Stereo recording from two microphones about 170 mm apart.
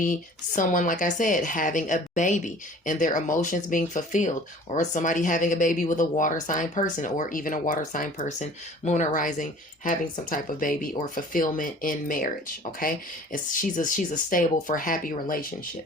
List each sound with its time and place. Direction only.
0.0 s speech: 50° left (ahead or behind)